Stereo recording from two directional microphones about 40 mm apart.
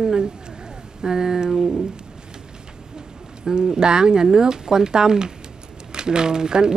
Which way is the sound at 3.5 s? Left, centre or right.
Centre.